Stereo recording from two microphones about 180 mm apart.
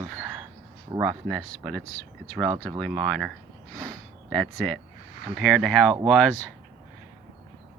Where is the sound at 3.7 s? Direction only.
5° left (ahead or behind).